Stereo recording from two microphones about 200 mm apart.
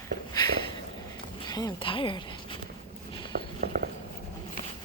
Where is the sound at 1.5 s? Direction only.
20° left (ahead or behind).